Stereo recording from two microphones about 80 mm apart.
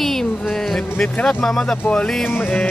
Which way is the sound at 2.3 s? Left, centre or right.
Left.